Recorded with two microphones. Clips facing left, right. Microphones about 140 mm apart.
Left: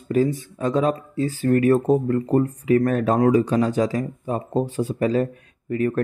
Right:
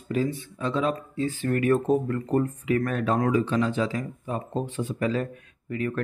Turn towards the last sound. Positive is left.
turn(degrees=40)  # may be behind; listen again after turning